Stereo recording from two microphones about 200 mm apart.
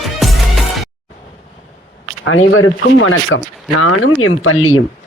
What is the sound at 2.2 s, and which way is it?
A woman's voice, 80° left.